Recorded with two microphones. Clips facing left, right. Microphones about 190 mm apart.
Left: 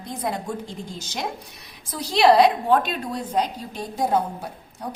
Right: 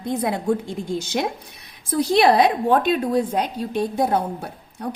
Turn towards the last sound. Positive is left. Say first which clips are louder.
# right 2 dB
turn(degrees=-60)  # may be behind; listen again after turning